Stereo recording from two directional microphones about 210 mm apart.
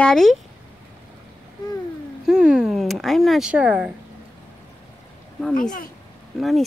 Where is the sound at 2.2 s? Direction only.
5° right (ahead or behind).